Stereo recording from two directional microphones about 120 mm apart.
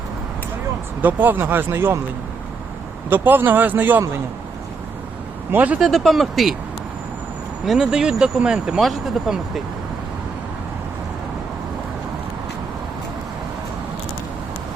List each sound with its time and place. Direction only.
1.0 s speech: 15° right (ahead or behind)
3.1 s speech: 15° right (ahead or behind)
5.5 s speech: 15° right (ahead or behind)
5.8 s speech: centre (ahead or behind)
7.6 s speech: 5° right (ahead or behind)